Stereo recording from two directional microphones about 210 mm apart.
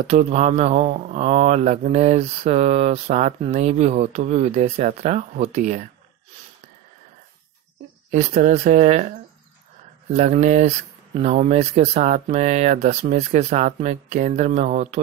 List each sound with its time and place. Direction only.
0.0 s speech: 30° right (ahead or behind)
8.1 s speech: 35° right (ahead or behind)
10.1 s speech: 35° right (ahead or behind)